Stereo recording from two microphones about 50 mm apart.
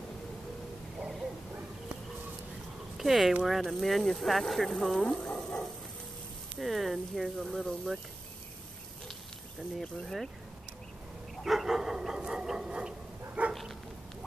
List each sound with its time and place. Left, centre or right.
3.0 s speech: centre
6.6 s speech: centre
9.8 s speech: centre
11.4 s dog: centre
12.2 s a sound: centre
13.5 s dog: centre